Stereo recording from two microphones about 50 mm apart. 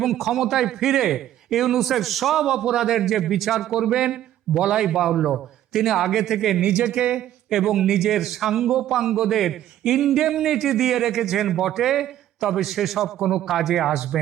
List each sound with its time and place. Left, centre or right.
0.0 s a man's voice: centre
6.6 s speech: centre
7.5 s a man's voice: centre